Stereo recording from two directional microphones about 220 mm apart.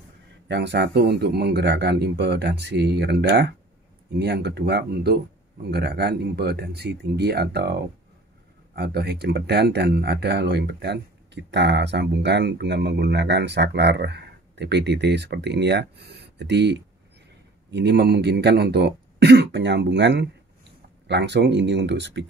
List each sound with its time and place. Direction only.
0.5 s speech: 50° right (ahead or behind)